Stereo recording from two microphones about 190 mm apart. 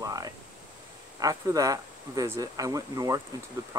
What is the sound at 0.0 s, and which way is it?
Pink noise, 20° right (ahead or behind).